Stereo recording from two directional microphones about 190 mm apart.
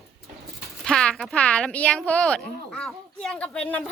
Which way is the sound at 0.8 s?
5° left (ahead or behind).